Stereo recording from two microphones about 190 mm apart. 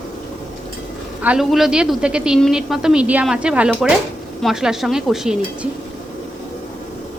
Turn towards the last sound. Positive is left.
turn(degrees=-5)  # may be behind; listen again after turning